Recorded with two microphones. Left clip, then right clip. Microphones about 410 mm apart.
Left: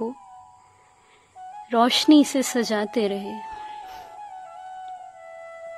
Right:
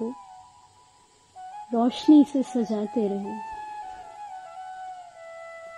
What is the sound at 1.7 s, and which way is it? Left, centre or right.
Speech, left.